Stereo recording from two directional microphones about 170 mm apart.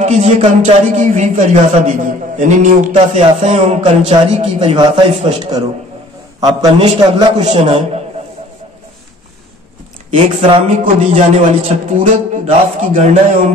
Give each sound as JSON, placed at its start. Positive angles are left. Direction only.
{"t": 0.0, "sound": "a man's voice", "side_deg": -40}
{"t": 6.4, "sound": "a man's voice", "side_deg": -25}
{"t": 10.1, "sound": "a man's voice", "side_deg": -30}
{"t": 10.8, "sound": "a man's voice", "side_deg": -45}